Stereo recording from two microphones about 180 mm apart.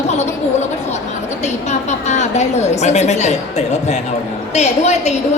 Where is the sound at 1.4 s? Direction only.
40° left (ahead or behind).